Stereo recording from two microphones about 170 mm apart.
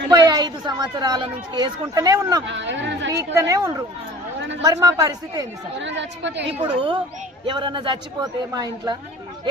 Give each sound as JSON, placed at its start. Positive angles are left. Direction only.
{"t": 0.1, "sound": "a woman's voice", "side_deg": -25}
{"t": 2.5, "sound": "a woman's voice", "side_deg": -90}
{"t": 3.1, "sound": "a man's voice", "side_deg": -20}
{"t": 4.4, "sound": "chatter", "side_deg": -90}
{"t": 4.6, "sound": "a man's voice", "side_deg": -20}
{"t": 5.8, "sound": "a woman's voice", "side_deg": -90}
{"t": 6.5, "sound": "a man's voice", "side_deg": -30}